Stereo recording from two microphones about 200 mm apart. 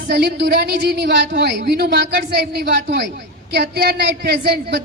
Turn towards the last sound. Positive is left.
turn(degrees=-55)  # may be behind; listen again after turning